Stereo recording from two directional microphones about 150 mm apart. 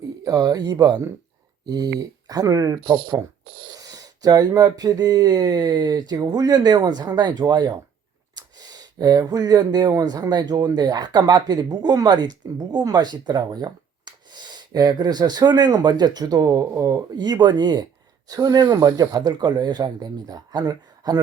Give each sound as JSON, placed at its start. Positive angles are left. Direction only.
{"t": 0.3, "sound": "speech", "side_deg": -25}